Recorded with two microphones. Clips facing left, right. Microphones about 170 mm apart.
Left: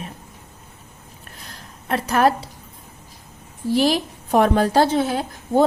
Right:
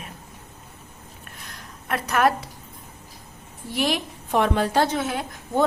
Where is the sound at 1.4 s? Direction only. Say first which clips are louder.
Left 2 dB; 30° left (ahead or behind).